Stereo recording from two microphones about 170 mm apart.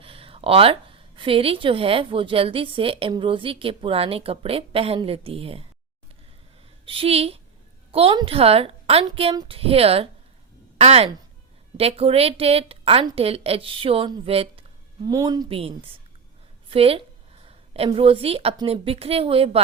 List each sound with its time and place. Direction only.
0.0 s a woman's voice: 35° right (ahead or behind)
6.8 s a woman's voice: 35° right (ahead or behind)
15.0 s a woman's voice: 20° right (ahead or behind)